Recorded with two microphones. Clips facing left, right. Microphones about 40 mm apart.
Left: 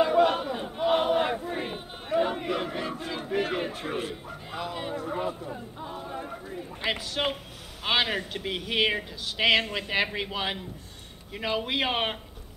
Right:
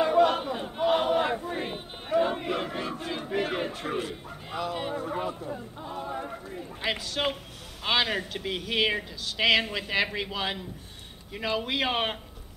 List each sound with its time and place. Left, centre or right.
0.1 s battle cry: centre
0.4 s battle cry: centre
0.9 s a sound: centre
4.7 s a man's voice: centre
5.4 s a man's voice: centre
5.9 s speech: centre
6.8 s a man's voice: centre